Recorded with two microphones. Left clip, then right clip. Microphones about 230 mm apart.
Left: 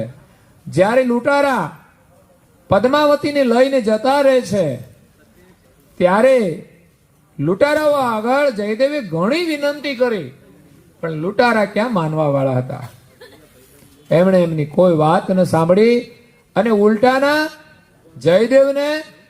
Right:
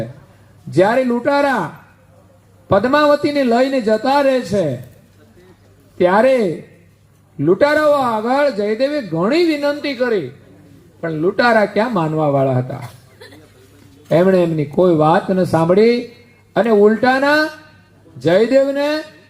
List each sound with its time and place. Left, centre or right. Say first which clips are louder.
0.7 s a man's voice: even; left
2.6 s a man's voice: right 1 dB; left
6.0 s a man's voice: even; left
11.0 s a man's voice: right 1 dB; left
14.1 s a man's voice: even; left